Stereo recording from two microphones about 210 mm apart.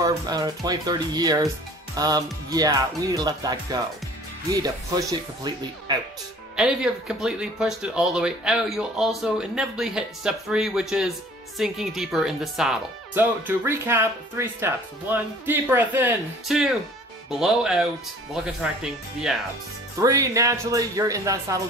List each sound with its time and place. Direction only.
0.0 s speech: 20° right (ahead or behind)
6.5 s speech: centre (ahead or behind)
20.0 s speech: 15° right (ahead or behind)